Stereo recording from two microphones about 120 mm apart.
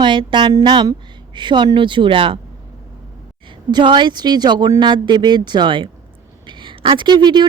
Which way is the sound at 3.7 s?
40° right (ahead or behind).